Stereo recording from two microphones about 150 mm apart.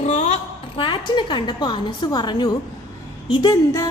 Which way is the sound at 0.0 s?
50° left (ahead or behind).